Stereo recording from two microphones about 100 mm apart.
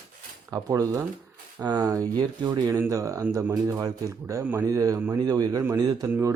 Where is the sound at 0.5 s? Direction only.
30° right (ahead or behind).